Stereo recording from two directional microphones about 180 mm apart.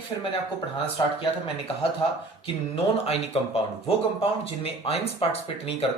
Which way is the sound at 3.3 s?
35° left (ahead or behind).